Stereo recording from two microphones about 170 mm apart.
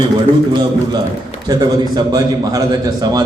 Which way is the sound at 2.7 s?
25° right (ahead or behind).